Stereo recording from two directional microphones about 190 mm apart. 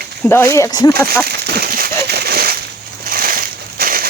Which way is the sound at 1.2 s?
55° right (ahead or behind).